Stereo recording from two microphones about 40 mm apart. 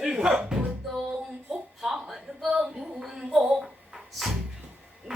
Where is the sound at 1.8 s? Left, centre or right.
Centre.